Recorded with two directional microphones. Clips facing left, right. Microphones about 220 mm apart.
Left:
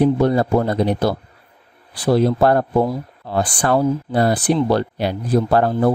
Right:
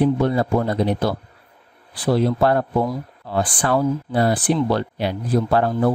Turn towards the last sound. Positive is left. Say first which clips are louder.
# left 2 dB
turn(degrees=35)  # may be behind; listen again after turning